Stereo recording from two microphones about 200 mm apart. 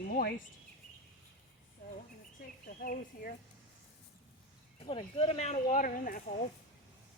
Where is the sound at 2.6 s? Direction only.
45° left (ahead or behind).